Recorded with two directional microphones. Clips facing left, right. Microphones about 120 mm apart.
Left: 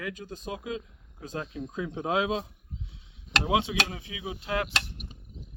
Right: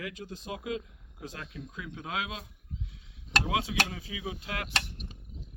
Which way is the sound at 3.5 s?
25° left (ahead or behind).